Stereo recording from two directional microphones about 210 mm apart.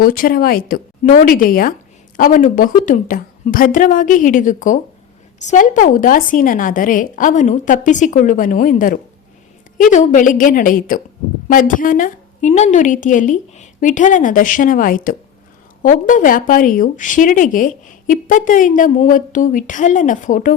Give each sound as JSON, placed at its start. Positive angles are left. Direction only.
{"t": 0.0, "sound": "a woman's voice", "side_deg": 40}